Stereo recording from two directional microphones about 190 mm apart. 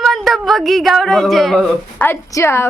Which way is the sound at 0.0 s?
Centre (ahead or behind).